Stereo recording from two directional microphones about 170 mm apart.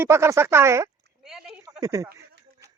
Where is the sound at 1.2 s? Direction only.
5° right (ahead or behind).